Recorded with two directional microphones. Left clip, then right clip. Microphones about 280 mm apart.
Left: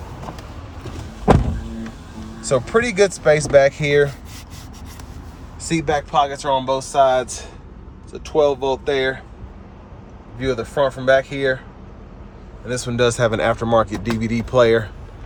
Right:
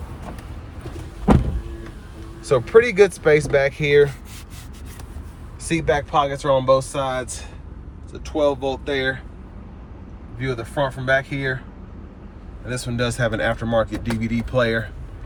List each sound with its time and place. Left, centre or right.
2.5 s speech: centre
5.6 s speech: centre
10.5 s speech: centre
12.6 s speech: centre